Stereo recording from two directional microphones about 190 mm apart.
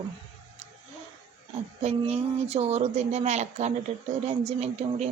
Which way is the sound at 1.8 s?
35° right (ahead or behind).